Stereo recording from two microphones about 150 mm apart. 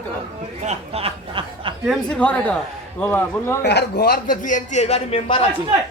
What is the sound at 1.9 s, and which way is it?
Speech, 5° left (ahead or behind).